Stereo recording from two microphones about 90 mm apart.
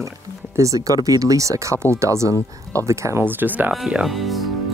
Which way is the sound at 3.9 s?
5° right (ahead or behind).